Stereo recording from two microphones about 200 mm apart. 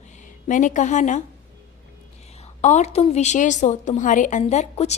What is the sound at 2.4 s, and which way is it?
A woman's voice, 35° left (ahead or behind).